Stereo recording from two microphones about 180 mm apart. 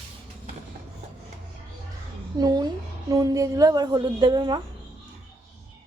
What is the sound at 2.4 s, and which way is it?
A woman's voice, 20° right (ahead or behind).